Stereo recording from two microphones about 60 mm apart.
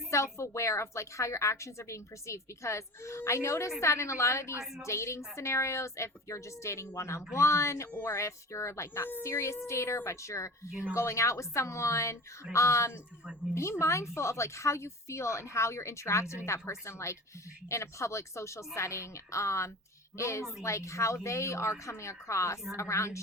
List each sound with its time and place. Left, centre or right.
0.1 s a woman's voice: left
4.6 s a woman's voice: centre
4.9 s a woman's voice: left